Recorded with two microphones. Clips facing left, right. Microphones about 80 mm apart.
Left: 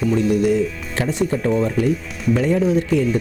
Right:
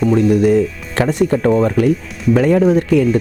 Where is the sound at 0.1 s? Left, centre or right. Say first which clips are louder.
Right 4 dB; right.